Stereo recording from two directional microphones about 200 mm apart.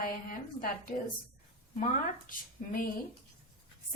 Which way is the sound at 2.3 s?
45° left (ahead or behind).